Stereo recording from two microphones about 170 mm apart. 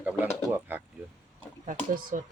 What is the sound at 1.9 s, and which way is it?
Speech, 50° right (ahead or behind).